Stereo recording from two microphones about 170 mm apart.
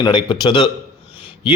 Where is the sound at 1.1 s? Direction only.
30° left (ahead or behind).